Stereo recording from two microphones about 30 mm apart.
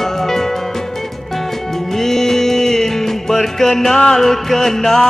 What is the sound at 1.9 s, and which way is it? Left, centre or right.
Music, centre.